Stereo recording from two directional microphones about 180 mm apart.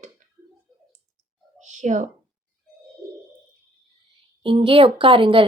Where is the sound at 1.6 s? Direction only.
40° right (ahead or behind).